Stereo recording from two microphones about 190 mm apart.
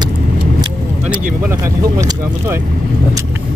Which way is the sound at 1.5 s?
15° right (ahead or behind).